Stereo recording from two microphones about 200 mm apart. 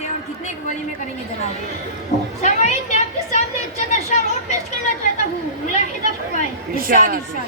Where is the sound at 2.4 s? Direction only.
35° left (ahead or behind).